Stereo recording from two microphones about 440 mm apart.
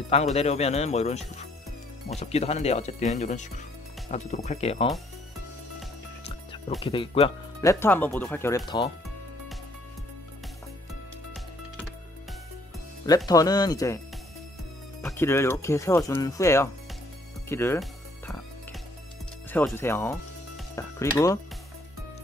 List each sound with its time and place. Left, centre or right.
0.1 s speech: centre
6.8 s speech: centre
13.0 s speech: centre
15.0 s speech: centre
17.5 s music: centre
19.5 s speech: centre